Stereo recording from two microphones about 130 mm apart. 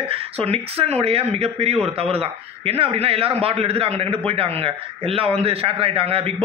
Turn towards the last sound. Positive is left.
turn(degrees=-45)  # may be behind; listen again after turning